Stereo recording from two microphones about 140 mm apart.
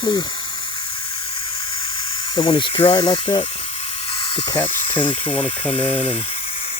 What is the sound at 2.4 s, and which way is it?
Speech, 35° left (ahead or behind).